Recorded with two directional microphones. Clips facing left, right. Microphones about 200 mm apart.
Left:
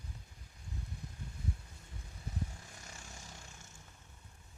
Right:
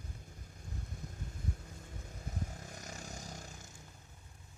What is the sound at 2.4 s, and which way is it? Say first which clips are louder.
Vehicle: right 2 dB; 45° right (ahead or behind).